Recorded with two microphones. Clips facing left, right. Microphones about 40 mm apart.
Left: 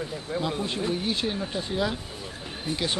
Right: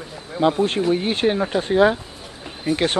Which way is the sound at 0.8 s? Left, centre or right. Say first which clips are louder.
Right 8 dB; right.